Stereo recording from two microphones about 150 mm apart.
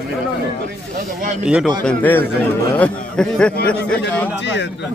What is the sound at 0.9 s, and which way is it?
Speech, 55° right (ahead or behind).